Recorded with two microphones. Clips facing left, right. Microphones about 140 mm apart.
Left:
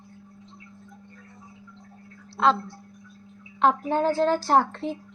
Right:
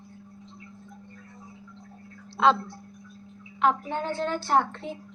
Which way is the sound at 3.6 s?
35° left (ahead or behind).